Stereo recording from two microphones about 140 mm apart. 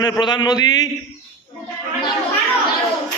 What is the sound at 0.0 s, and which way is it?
Speech, 30° left (ahead or behind).